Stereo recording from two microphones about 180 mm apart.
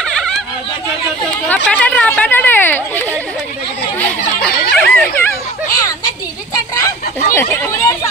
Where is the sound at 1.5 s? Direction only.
10° left (ahead or behind).